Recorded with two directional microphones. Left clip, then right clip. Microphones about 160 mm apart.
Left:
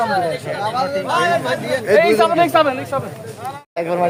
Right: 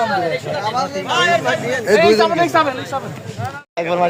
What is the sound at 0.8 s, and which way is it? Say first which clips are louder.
Speech: left 1 dB; 60° left (ahead or behind).